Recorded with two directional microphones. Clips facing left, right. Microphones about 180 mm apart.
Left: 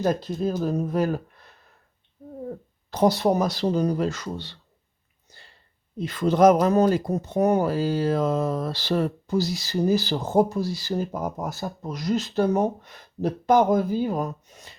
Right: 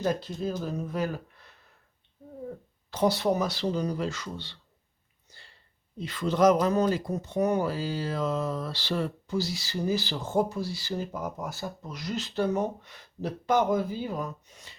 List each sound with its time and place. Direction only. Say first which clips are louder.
0.0 s speech: left 5 dB; 45° left (ahead or behind)
2.9 s speech: left 5 dB; 40° left (ahead or behind)
5.3 s a sound: left 3 dB; 45° left (ahead or behind)
6.0 s speech: left 5 dB; 45° left (ahead or behind)